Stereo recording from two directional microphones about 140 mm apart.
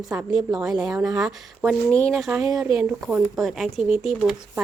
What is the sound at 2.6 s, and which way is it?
A woman's voice, 10° right (ahead or behind).